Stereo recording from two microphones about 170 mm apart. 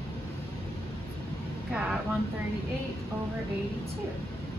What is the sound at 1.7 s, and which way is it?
Vehicle, 5° right (ahead or behind).